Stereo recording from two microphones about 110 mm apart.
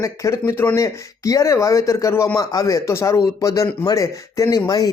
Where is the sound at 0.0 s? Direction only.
30° left (ahead or behind).